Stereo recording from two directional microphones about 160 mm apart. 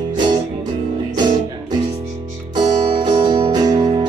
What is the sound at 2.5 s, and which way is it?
Music, 25° right (ahead or behind).